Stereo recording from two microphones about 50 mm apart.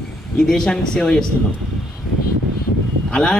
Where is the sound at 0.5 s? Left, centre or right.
Centre.